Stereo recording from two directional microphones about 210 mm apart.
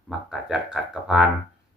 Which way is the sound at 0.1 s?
5° right (ahead or behind).